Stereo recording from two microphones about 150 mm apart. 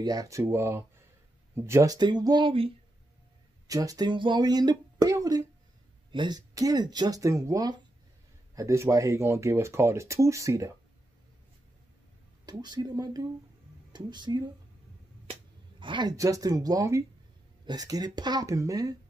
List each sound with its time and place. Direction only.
0.0 s speech: 25° right (ahead or behind)
3.6 s speech: 25° right (ahead or behind)
12.4 s speech: 25° right (ahead or behind)
15.8 s speech: 30° right (ahead or behind)